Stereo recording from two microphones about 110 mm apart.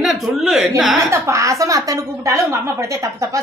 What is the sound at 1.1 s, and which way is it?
A woman's voice, 25° right (ahead or behind).